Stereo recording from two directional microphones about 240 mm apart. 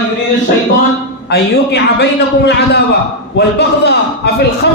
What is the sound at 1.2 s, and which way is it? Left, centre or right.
A man's voice, left.